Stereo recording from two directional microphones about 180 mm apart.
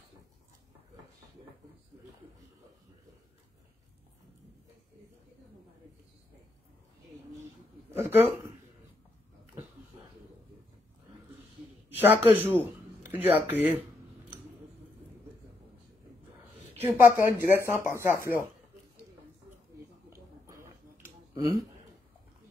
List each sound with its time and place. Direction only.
7.9 s a woman's voice: 10° right (ahead or behind)
11.9 s a woman's voice: 10° right (ahead or behind)
16.8 s a woman's voice: 15° right (ahead or behind)
20.1 s a sound: 15° right (ahead or behind)